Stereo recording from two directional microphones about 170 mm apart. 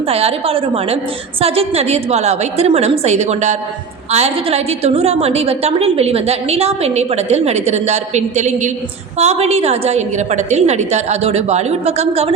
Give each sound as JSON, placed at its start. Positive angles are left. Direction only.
{"t": 0.0, "sound": "a woman's voice", "side_deg": -35}